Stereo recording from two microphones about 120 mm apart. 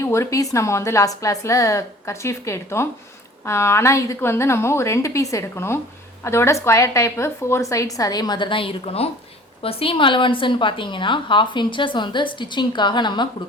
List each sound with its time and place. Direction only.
0.0 s a woman's voice: 25° left (ahead or behind); by 13.2 s 40° left (ahead or behind)